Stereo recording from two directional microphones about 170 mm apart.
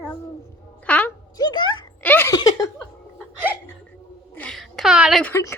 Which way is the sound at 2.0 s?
15° left (ahead or behind).